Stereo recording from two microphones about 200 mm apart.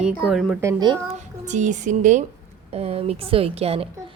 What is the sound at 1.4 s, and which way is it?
A woman's voice, 35° right (ahead or behind).